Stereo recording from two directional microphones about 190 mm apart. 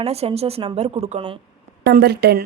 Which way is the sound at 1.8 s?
60° right (ahead or behind).